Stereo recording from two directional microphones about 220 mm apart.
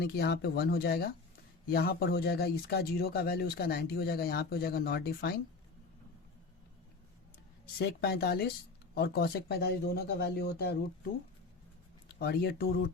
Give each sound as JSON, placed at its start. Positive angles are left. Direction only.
{"t": 0.0, "sound": "speech", "side_deg": 45}
{"t": 7.8, "sound": "speech", "side_deg": 45}
{"t": 12.2, "sound": "speech", "side_deg": 45}